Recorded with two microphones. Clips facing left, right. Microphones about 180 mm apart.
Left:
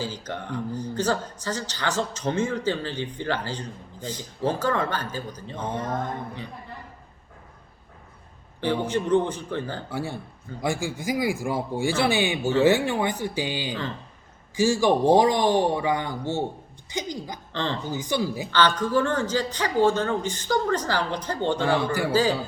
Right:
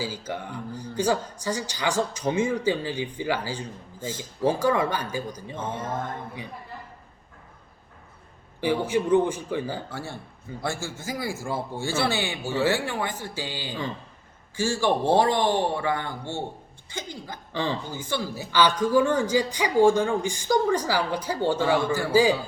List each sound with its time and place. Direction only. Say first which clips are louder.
0.0 s speech: even; 10° right (ahead or behind)
5.5 s speech: left 3 dB; 15° left (ahead or behind)
8.6 s speech: right 1 dB; 10° right (ahead or behind)
9.9 s speech: left 5 dB; 15° left (ahead or behind)
17.5 s a man's voice: right 1 dB; 10° right (ahead or behind)
17.9 s speech: left 4 dB; 15° left (ahead or behind)
18.5 s speech: right 2 dB; 10° right (ahead or behind)